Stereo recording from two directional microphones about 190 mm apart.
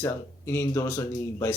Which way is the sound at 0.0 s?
15° left (ahead or behind).